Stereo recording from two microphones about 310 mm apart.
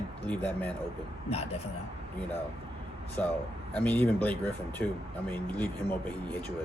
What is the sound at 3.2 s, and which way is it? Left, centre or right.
Speech, centre.